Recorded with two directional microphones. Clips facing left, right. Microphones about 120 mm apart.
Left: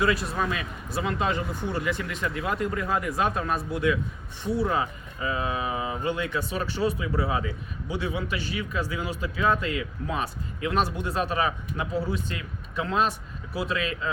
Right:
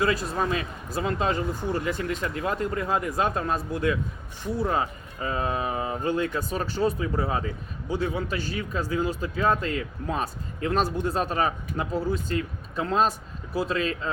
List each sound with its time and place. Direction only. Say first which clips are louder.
0.0 s speech: even; 40° right (ahead or behind)